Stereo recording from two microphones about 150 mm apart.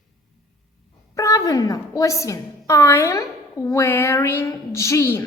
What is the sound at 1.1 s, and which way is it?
A woman's voice, 20° left (ahead or behind).